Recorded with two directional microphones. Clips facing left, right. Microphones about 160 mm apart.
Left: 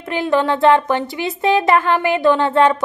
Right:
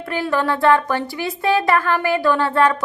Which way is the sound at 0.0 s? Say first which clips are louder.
Left 3 dB; 20° left (ahead or behind).